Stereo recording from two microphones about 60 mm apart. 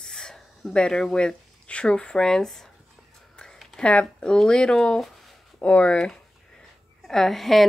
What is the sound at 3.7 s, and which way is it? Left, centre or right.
Speech, centre.